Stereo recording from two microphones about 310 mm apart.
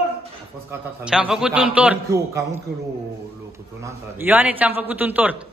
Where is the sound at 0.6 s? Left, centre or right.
Centre.